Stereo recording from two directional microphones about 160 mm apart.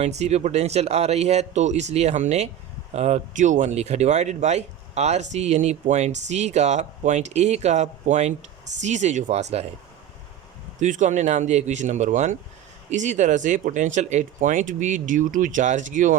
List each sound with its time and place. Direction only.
0.0 s speech: 45° right (ahead or behind)
10.8 s speech: 50° right (ahead or behind)